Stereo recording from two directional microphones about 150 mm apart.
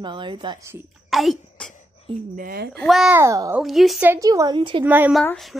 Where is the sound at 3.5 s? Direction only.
Centre (ahead or behind).